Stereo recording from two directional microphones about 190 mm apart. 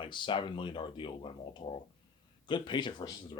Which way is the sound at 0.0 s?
25° left (ahead or behind).